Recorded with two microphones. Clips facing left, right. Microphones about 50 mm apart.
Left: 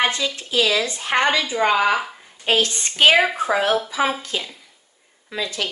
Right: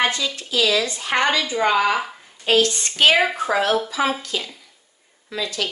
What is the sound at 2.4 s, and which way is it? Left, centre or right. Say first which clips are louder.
Speech: right 2 dB; left.